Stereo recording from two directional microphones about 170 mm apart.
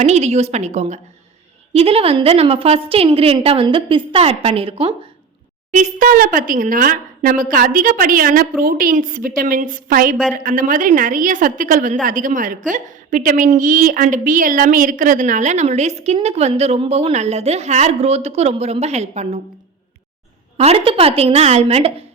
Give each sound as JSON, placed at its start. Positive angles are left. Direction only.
{"t": 0.0, "sound": "a woman's voice", "side_deg": -40}
{"t": 5.7, "sound": "a woman's voice", "side_deg": -50}
{"t": 20.6, "sound": "a woman's voice", "side_deg": -35}